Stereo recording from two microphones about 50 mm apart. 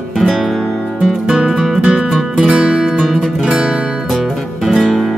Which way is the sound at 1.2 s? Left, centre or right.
Centre.